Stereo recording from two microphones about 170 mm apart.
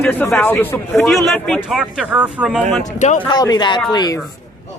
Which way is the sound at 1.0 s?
Centre (ahead or behind).